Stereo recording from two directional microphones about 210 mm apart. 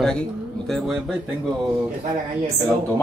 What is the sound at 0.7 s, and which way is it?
Speech, centre (ahead or behind).